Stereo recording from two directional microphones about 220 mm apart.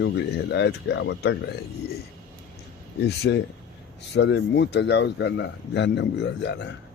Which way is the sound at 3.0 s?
50° left (ahead or behind).